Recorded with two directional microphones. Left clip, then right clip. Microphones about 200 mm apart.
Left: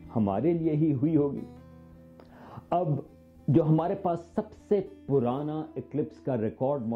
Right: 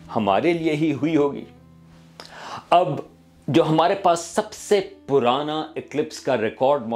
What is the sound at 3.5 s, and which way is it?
A woman's voice, 10° right (ahead or behind).